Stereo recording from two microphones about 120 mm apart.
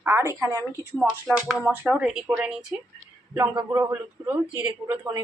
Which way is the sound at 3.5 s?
25° right (ahead or behind).